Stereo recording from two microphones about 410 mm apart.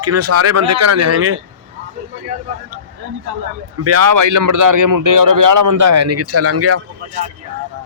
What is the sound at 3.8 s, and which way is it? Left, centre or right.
Speech, right.